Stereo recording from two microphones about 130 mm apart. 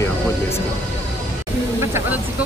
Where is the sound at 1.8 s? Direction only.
20° right (ahead or behind).